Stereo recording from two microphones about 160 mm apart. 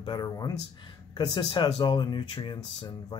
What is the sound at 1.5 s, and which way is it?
Speech, 30° left (ahead or behind).